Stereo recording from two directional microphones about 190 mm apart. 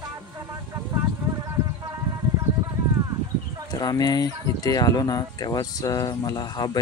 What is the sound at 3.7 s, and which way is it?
Speech, 20° left (ahead or behind).